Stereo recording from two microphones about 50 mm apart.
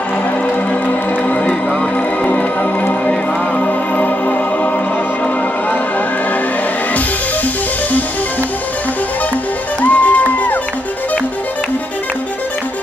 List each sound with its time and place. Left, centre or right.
0.8 s music: left
9.8 s music: left